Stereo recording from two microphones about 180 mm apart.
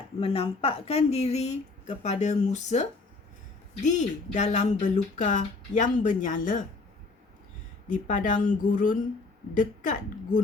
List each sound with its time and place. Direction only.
0.2 s speech: 30° left (ahead or behind)
3.8 s speech: 40° left (ahead or behind)
7.9 s speech: 45° left (ahead or behind)